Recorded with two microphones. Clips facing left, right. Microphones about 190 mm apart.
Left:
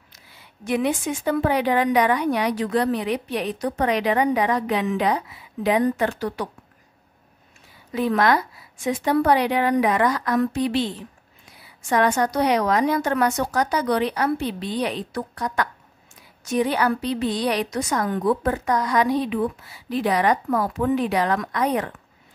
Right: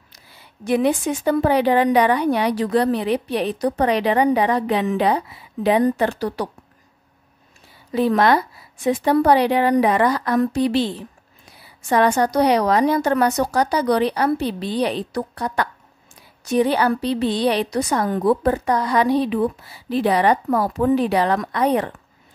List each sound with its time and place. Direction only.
0.7 s a woman's voice: 35° right (ahead or behind)
7.9 s a woman's voice: 30° right (ahead or behind)